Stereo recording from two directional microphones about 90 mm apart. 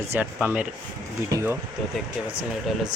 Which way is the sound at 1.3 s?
30° right (ahead or behind).